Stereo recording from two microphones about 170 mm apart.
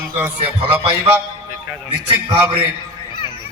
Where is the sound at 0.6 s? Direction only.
25° right (ahead or behind).